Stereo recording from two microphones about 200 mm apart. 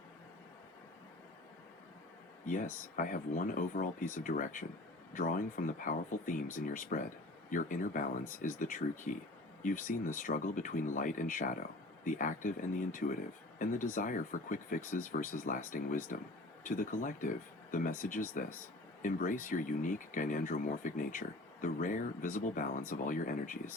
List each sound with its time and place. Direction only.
2.5 s speech: 45° left (ahead or behind)